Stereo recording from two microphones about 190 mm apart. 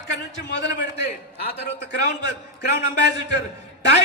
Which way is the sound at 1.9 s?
60° left (ahead or behind).